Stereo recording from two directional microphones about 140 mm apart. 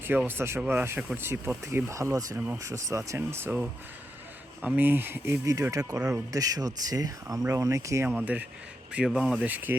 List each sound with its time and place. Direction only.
0.0 s speech: 15° right (ahead or behind)